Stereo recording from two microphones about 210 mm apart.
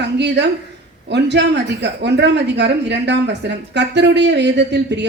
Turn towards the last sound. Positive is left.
turn(degrees=-55)  # may be behind; listen again after turning